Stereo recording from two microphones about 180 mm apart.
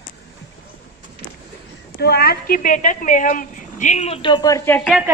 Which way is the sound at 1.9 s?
60° left (ahead or behind).